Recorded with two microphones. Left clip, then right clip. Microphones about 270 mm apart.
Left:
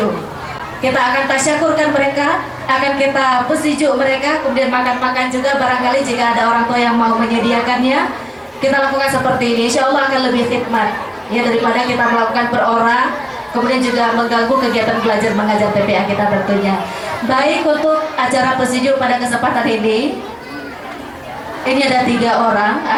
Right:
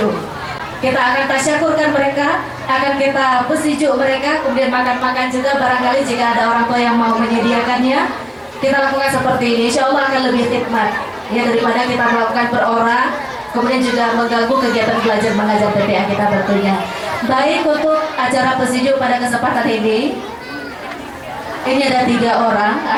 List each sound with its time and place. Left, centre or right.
0.9 s a woman's voice: centre
21.6 s a woman's voice: centre